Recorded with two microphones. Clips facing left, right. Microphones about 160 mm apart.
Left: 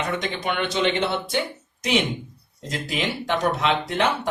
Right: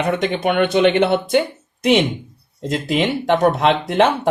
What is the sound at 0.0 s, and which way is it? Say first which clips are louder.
Speech: right 8 dB; 60° right (ahead or behind).